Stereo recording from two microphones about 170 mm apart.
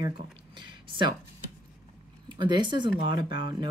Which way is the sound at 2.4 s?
25° right (ahead or behind).